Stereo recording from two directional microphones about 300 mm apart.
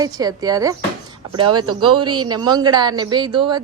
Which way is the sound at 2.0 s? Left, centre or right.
Right.